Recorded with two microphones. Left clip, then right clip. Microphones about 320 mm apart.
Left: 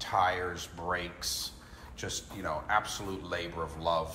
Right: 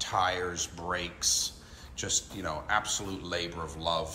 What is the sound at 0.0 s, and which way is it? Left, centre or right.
Speech, centre.